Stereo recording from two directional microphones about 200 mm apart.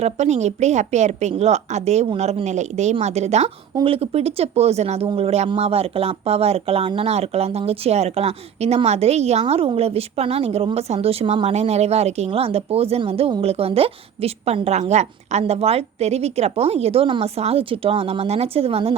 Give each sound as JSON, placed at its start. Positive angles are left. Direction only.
{"t": 0.0, "sound": "speech", "side_deg": -35}